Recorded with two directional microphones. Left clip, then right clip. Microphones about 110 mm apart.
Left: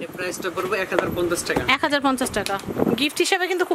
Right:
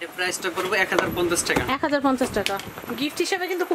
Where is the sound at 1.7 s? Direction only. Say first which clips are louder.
Left 7 dB; 55° left (ahead or behind).